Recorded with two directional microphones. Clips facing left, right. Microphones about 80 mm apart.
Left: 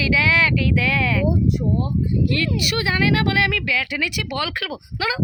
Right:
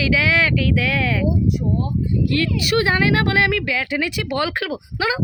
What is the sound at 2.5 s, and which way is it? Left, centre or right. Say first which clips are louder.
Speech: right 4 dB; right.